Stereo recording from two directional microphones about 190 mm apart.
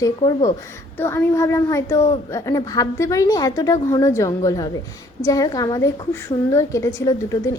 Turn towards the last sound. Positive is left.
turn(degrees=15)  # may be behind; listen again after turning